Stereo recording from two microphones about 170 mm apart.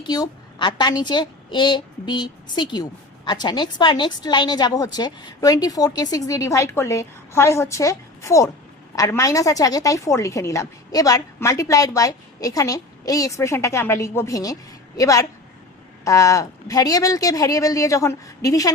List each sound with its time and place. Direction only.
0.0 s a woman's voice: 25° left (ahead or behind)